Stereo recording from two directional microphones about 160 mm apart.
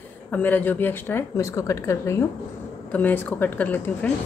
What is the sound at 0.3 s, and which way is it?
A woman's voice, 10° left (ahead or behind).